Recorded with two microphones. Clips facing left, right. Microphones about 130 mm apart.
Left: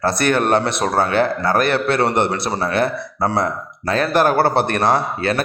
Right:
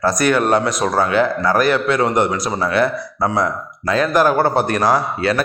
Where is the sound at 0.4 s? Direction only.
60° left (ahead or behind).